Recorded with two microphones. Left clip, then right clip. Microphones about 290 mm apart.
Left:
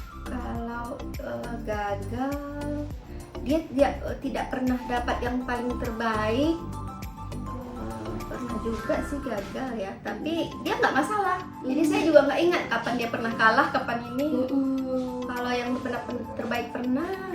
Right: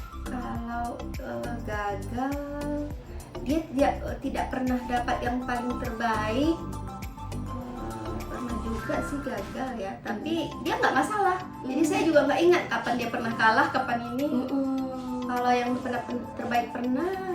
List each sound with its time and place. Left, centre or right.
1.7 s a woman's voice: centre
3.4 s a woman's voice: centre
8.4 s a woman's voice: centre